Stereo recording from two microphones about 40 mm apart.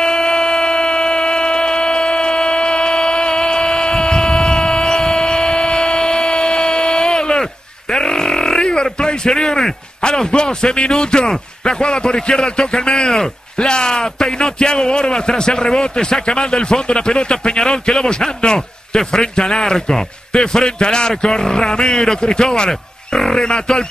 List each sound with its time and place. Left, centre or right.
0.0 s a sound: centre
7.9 s grunt: centre
9.0 s a man's voice: centre